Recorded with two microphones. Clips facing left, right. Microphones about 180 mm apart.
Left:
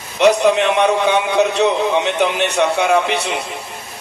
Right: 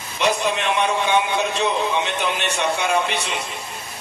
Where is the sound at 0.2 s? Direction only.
65° left (ahead or behind).